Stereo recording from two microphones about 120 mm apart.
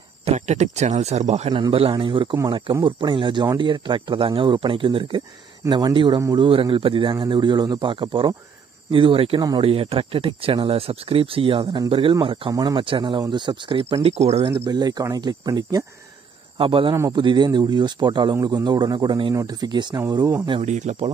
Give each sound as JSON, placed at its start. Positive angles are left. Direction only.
{"t": 0.2, "sound": "speech", "side_deg": -65}
{"t": 1.5, "sound": "a man's voice", "side_deg": -45}
{"t": 14.7, "sound": "a man's voice", "side_deg": -35}
{"t": 16.5, "sound": "a man's voice", "side_deg": -45}
{"t": 20.6, "sound": "speech", "side_deg": -75}